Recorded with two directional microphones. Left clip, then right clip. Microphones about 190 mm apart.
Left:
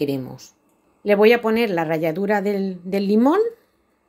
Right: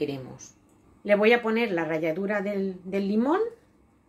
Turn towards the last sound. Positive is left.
turn(degrees=55)  # may be behind; listen again after turning